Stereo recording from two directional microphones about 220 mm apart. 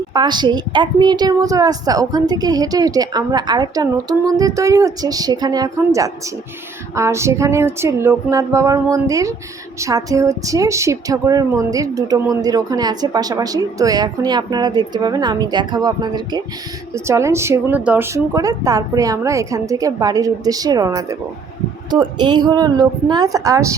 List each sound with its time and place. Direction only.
0.1 s a woman's voice: 20° right (ahead or behind)